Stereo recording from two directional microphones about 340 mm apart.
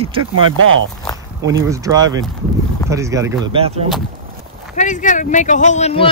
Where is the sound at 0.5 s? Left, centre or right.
Right.